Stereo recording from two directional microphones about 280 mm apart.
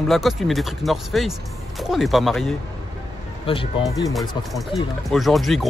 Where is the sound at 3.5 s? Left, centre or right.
Centre.